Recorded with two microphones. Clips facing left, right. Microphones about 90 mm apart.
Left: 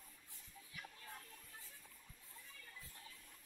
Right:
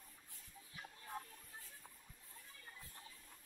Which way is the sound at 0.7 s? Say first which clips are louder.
Even; 20° right (ahead or behind).